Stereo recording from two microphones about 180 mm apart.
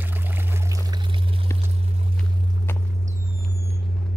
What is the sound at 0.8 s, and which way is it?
Pour, 25° right (ahead or behind).